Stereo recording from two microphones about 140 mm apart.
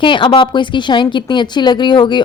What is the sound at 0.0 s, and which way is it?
A woman's voice, 35° left (ahead or behind).